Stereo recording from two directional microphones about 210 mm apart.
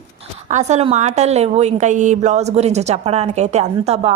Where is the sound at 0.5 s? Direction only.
30° right (ahead or behind).